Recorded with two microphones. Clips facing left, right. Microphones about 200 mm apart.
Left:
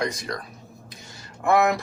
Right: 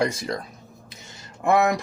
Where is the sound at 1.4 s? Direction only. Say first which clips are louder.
Even; 15° right (ahead or behind).